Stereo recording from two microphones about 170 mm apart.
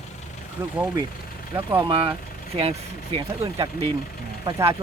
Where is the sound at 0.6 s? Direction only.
10° right (ahead or behind).